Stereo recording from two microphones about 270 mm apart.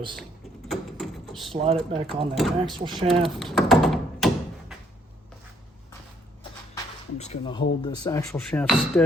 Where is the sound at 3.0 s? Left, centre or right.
Centre.